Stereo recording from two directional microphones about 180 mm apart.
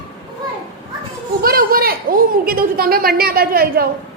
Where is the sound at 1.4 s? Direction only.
55° right (ahead or behind).